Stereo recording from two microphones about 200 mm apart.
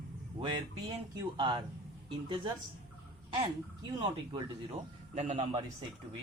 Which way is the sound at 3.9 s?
25° right (ahead or behind).